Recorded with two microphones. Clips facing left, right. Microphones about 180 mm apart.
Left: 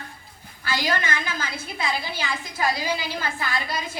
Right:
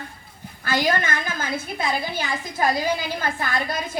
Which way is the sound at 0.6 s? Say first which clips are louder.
Right 4 dB; 50° right (ahead or behind).